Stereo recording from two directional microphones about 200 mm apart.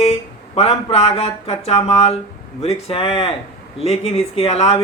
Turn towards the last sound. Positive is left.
turn(degrees=30)  # may be behind; listen again after turning